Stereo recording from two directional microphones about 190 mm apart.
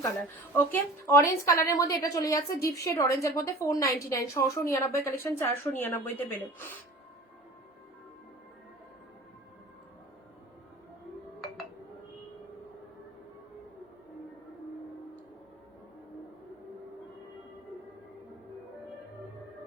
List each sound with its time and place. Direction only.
0.5 s a woman's voice: 10° left (ahead or behind)